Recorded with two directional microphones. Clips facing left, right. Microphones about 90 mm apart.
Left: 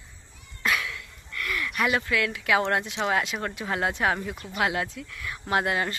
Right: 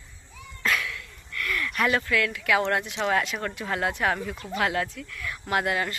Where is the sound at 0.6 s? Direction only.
20° left (ahead or behind).